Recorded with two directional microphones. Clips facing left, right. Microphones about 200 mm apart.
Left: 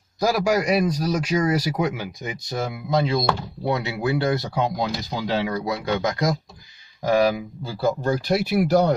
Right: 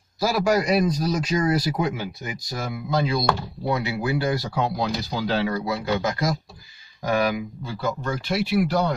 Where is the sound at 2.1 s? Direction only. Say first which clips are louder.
Left 4 dB; 20° left (ahead or behind).